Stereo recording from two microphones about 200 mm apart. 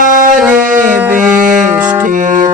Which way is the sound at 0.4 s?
10° right (ahead or behind).